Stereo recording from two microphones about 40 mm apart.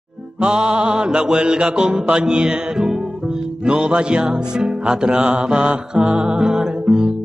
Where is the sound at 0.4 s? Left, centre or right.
Right.